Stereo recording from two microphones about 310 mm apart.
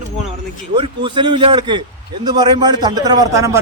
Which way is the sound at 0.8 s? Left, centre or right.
Centre.